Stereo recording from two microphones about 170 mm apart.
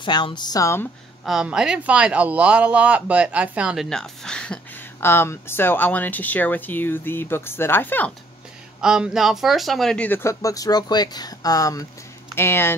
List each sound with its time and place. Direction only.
0.0 s a woman's voice: 25° left (ahead or behind)
1.2 s speech: 5° right (ahead or behind)
8.8 s speech: 5° right (ahead or behind); by 12.7 s 15° left (ahead or behind)